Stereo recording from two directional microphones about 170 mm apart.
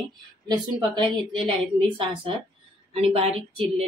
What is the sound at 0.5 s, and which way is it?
A woman's voice, 25° right (ahead or behind).